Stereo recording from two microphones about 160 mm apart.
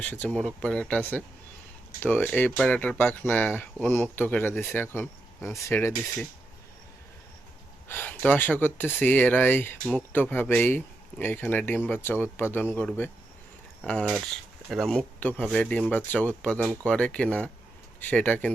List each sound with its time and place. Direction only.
0.0 s speech: 10° left (ahead or behind)
7.9 s speech: 10° left (ahead or behind)